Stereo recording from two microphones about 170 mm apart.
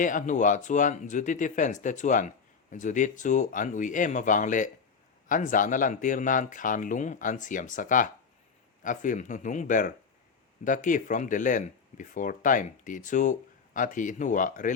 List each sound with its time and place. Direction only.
0.0 s speech: 50° left (ahead or behind)